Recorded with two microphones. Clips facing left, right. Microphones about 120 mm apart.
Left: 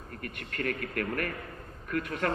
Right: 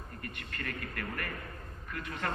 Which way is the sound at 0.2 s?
55° left (ahead or behind).